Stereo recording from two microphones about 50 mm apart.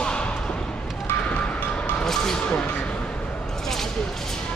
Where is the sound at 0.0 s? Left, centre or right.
Centre.